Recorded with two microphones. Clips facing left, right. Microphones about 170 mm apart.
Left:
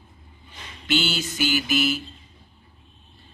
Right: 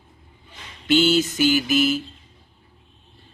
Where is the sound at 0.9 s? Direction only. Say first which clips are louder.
Right 8 dB; 40° right (ahead or behind).